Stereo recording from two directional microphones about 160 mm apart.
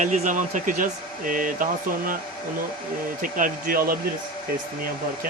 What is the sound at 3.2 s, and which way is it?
Speech, 60° right (ahead or behind).